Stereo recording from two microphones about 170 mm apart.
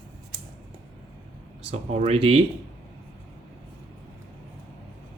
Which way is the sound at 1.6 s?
35° right (ahead or behind).